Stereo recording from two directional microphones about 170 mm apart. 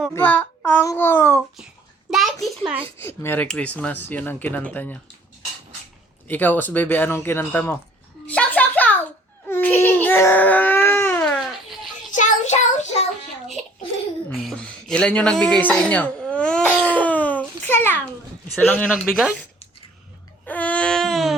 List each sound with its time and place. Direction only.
0.1 s speech: 10° left (ahead or behind)
2.0 s a sound: centre (ahead or behind)
3.0 s speech: 15° left (ahead or behind)
6.2 s speech: 10° left (ahead or behind)
8.3 s a sound: 10° left (ahead or behind)
9.5 s baby cry: 10° left (ahead or behind)
12.1 s child singing: 45° left (ahead or behind)
14.3 s a sound: centre (ahead or behind)
18.5 s speech: 10° left (ahead or behind)
20.4 s baby cry: 10° left (ahead or behind)